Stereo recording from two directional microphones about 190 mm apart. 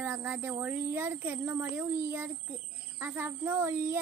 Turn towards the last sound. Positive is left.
turn(degrees=-10)  # may be behind; listen again after turning